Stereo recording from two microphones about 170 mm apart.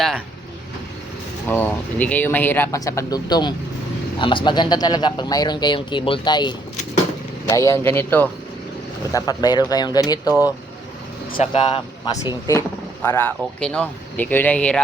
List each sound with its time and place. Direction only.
1.5 s a man's voice: 10° left (ahead or behind)
9.1 s a man's voice: 25° left (ahead or behind)
11.3 s a man's voice: 30° left (ahead or behind)
12.5 s speech: 15° left (ahead or behind)